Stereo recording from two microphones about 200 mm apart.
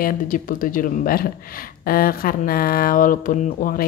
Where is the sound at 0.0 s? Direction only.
45° left (ahead or behind).